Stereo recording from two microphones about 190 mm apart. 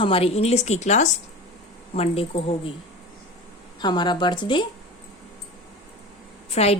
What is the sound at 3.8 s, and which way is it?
Speech, 20° left (ahead or behind).